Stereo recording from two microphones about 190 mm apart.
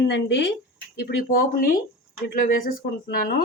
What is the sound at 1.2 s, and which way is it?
Speech, 50° left (ahead or behind).